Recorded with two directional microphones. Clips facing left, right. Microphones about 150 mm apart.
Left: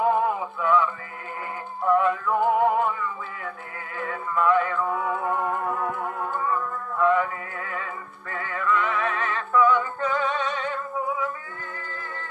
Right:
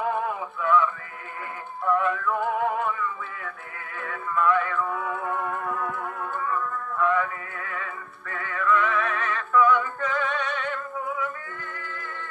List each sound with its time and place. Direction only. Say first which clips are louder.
0.0 s a sound: left 5 dB; 30° left (ahead or behind)
1.9 s synthetic singing: left 3 dB; 25° left (ahead or behind)
4.0 s music: left 1 dB; 25° left (ahead or behind)